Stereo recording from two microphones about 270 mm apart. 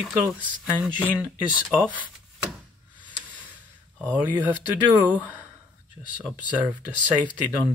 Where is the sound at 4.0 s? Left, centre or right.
Centre.